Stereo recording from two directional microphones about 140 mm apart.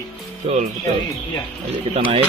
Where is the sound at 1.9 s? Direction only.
45° right (ahead or behind).